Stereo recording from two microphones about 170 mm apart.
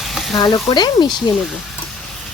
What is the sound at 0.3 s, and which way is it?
Speech, 25° left (ahead or behind).